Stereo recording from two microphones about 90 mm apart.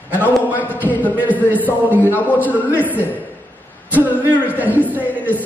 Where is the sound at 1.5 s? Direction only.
20° right (ahead or behind).